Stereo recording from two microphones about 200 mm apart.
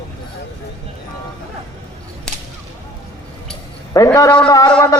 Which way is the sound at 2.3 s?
5° left (ahead or behind).